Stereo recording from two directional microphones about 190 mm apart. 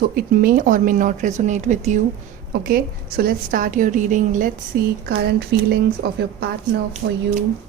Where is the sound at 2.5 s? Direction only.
50° right (ahead or behind).